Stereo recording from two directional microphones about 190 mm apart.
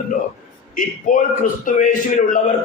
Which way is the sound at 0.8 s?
45° left (ahead or behind).